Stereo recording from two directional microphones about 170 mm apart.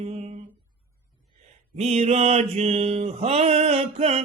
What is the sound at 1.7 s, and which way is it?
Mantra, 40° right (ahead or behind).